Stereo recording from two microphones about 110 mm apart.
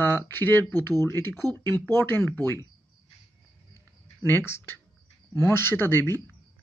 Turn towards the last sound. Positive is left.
turn(degrees=20)  # may be behind; listen again after turning